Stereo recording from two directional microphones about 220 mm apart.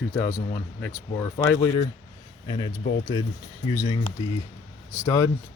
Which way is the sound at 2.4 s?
20° left (ahead or behind).